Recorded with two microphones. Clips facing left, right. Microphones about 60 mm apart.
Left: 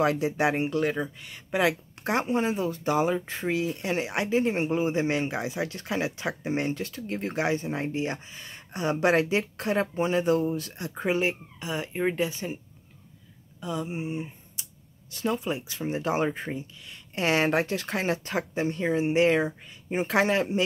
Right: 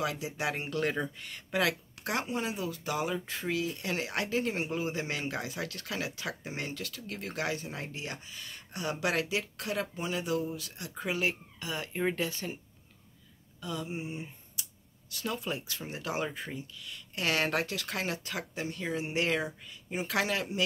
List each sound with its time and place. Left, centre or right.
0.0 s speech: left
0.5 s speech: left
0.7 s speech: centre
13.6 s speech: left